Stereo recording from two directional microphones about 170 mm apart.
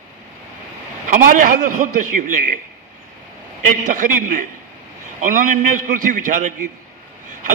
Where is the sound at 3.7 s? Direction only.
50° right (ahead or behind).